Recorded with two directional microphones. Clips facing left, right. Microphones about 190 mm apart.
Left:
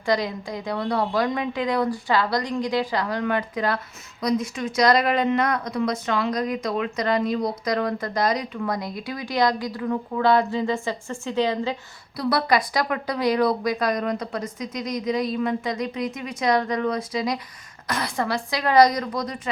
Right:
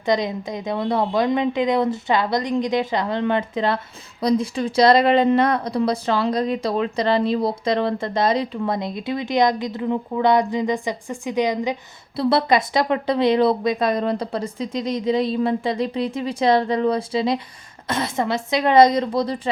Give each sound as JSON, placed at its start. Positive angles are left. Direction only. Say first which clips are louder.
{"t": 0.0, "sound": "speech", "louder": "right 3 dB", "side_deg": -20}
{"t": 12.1, "sound": "speech", "louder": "right 4 dB", "side_deg": -25}